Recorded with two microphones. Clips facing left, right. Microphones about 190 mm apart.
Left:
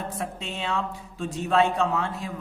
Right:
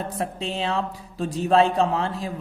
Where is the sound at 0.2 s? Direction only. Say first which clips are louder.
Right 5 dB; 35° right (ahead or behind).